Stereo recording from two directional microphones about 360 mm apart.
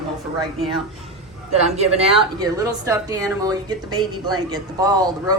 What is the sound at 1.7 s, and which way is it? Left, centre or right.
Speech, centre.